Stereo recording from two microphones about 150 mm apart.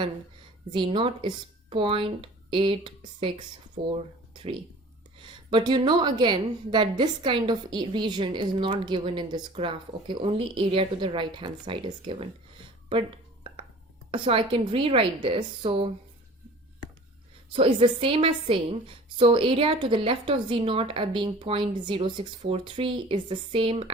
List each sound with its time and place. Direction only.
0.7 s a woman's voice: 35° right (ahead or behind)
12.9 s a sound: 35° right (ahead or behind)
14.1 s a woman's voice: 35° right (ahead or behind)
17.5 s a woman's voice: 35° right (ahead or behind)